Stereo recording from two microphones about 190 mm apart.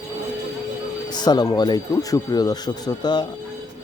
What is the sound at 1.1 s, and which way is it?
Speech, 20° left (ahead or behind).